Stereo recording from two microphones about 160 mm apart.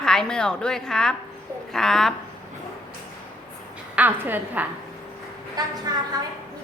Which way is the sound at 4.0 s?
10° right (ahead or behind).